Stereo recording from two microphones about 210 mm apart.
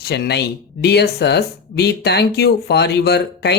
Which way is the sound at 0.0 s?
50° left (ahead or behind).